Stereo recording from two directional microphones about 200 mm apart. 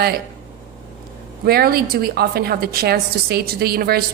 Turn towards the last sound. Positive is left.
turn(degrees=-50)  # may be behind; listen again after turning